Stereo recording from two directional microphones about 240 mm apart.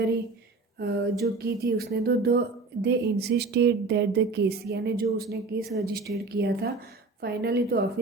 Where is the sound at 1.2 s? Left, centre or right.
Right.